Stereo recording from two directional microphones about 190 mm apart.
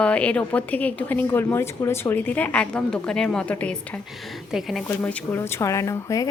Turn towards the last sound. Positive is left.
turn(degrees=15)  # may be behind; listen again after turning